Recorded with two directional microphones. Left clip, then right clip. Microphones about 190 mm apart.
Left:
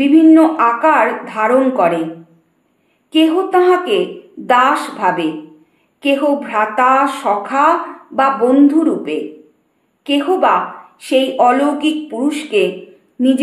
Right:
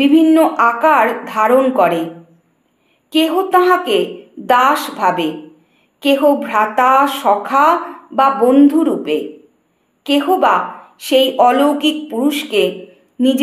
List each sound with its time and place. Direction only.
0.0 s speech: 30° right (ahead or behind)
3.1 s speech: 30° right (ahead or behind)